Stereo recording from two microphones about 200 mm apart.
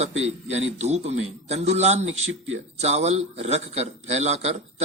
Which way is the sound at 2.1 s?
80° right.